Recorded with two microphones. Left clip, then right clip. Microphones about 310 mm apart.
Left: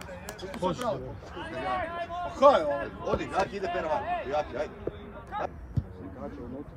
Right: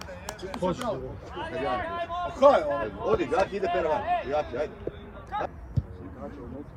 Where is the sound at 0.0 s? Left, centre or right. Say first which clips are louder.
Right 2 dB; centre.